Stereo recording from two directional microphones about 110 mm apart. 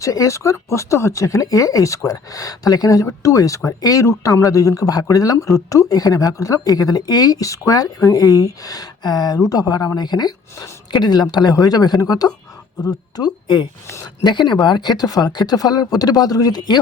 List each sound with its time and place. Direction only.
0.0 s speech: 30° left (ahead or behind)